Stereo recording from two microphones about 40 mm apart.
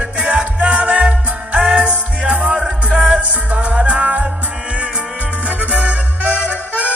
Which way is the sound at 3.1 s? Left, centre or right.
Right.